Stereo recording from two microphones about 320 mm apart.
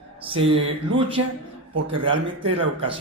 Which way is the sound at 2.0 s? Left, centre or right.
Centre.